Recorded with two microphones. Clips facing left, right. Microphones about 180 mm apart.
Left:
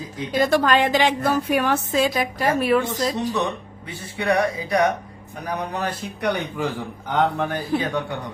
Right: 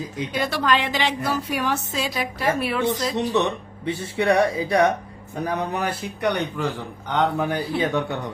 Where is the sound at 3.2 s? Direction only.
20° right (ahead or behind).